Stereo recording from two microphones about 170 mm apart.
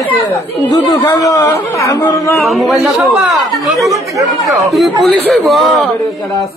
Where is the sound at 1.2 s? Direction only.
20° left (ahead or behind).